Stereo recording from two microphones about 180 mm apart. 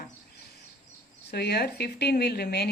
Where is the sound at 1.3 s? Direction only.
60° left (ahead or behind).